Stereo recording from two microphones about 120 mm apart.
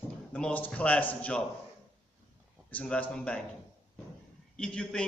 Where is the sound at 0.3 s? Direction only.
10° left (ahead or behind).